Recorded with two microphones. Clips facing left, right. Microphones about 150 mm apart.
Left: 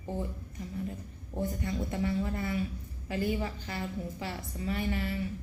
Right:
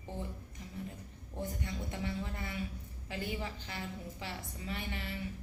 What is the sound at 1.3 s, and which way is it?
A woman's voice, 45° left (ahead or behind).